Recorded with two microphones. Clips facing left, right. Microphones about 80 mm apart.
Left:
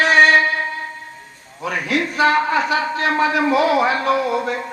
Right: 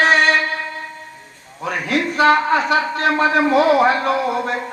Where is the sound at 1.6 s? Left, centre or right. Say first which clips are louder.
Right 1 dB; right.